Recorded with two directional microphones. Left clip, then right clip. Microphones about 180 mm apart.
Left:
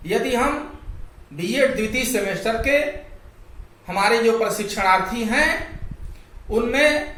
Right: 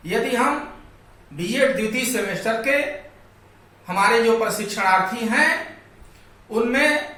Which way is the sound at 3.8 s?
15° left (ahead or behind).